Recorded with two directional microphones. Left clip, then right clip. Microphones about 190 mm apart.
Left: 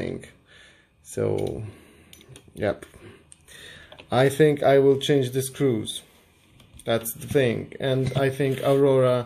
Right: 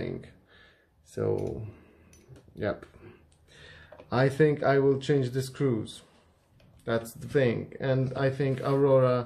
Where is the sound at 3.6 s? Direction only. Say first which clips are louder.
Left 5 dB; 35° left (ahead or behind).